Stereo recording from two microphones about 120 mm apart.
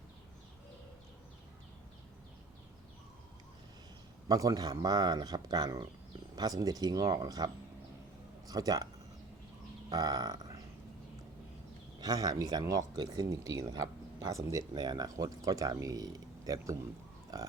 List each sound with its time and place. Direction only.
4.3 s speech: 30° right (ahead or behind)
9.9 s a sound: 35° right (ahead or behind)
11.9 s speech: 30° right (ahead or behind)